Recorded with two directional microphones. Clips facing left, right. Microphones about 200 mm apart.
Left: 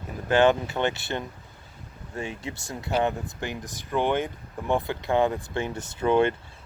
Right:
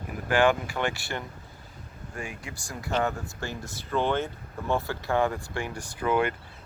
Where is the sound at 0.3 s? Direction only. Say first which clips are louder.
Left 3 dB; 20° left (ahead or behind).